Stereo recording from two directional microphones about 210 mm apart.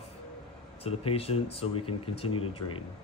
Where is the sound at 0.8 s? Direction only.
30° left (ahead or behind).